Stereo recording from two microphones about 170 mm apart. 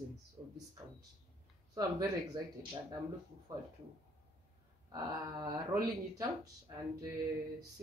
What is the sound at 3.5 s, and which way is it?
Speech, 20° right (ahead or behind).